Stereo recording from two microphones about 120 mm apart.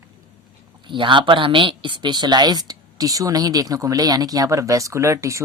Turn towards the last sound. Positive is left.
turn(degrees=-25)  # may be behind; listen again after turning